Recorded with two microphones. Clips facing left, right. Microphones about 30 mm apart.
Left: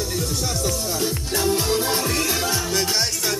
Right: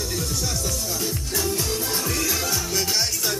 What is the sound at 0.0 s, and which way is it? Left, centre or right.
Music, centre.